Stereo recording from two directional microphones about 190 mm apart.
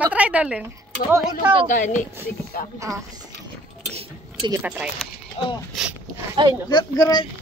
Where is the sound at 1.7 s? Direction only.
40° left (ahead or behind).